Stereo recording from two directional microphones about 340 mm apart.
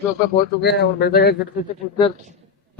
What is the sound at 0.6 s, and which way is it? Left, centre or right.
Speech, left.